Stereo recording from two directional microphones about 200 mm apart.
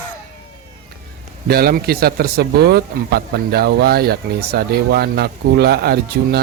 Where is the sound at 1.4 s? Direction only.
50° right (ahead or behind).